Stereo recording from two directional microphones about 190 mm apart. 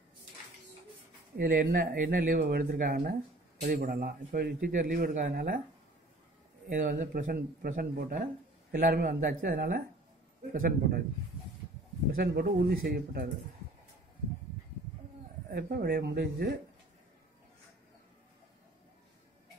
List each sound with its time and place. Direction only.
1.3 s a man's voice: 55° right (ahead or behind)
6.7 s a man's voice: 45° right (ahead or behind)
12.2 s a man's voice: 55° right (ahead or behind)
15.5 s speech: 55° right (ahead or behind)